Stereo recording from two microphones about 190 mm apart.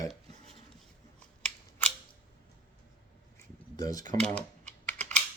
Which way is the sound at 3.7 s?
20° left (ahead or behind).